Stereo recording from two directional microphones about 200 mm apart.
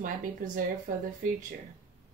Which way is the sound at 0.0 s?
40° right (ahead or behind).